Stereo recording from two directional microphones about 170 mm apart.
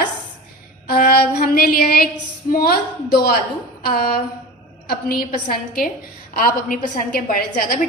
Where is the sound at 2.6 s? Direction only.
65° left (ahead or behind).